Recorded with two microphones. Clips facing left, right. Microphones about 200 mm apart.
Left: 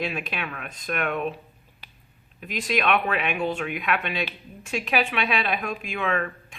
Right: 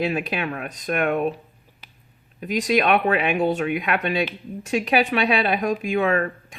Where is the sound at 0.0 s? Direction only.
35° right (ahead or behind).